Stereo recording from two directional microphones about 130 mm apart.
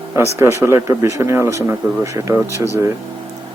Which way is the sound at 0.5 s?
20° right (ahead or behind).